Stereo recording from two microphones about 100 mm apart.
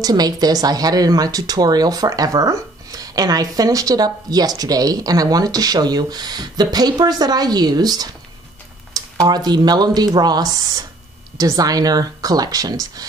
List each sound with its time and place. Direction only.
0.0 s a woman's voice: 40° right (ahead or behind)